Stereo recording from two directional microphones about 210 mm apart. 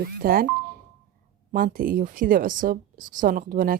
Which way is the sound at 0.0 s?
45° right (ahead or behind).